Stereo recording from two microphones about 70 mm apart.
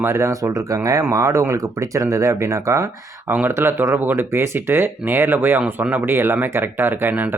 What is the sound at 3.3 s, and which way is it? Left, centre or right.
Speech, right.